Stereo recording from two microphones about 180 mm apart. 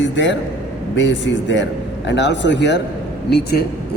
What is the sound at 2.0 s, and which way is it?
Speech, 75° left (ahead or behind).